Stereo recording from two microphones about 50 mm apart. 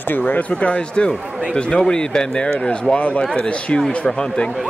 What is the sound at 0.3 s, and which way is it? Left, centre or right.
Speech, left.